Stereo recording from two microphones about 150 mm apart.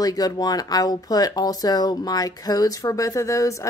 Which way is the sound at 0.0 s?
25° left (ahead or behind).